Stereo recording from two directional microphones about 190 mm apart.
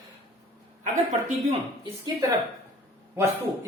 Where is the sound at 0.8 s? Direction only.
40° right (ahead or behind).